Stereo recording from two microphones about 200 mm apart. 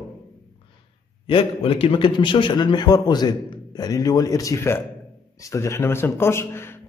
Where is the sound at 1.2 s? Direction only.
25° left (ahead or behind).